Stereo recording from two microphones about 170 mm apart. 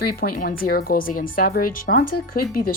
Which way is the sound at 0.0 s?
60° left (ahead or behind).